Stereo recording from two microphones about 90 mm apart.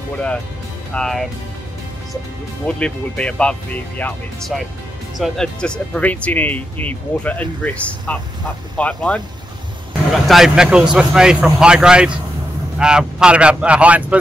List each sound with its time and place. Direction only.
0.9 s speech: 5° left (ahead or behind)
2.6 s speech: 10° left (ahead or behind)
4.4 s speech: centre (ahead or behind)
10.1 s a man's voice: centre (ahead or behind)